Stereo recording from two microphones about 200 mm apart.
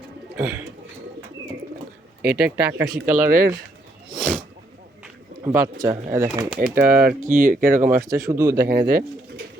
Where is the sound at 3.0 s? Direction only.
45° right (ahead or behind).